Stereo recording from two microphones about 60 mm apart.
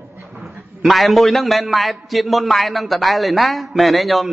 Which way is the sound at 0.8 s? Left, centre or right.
Centre.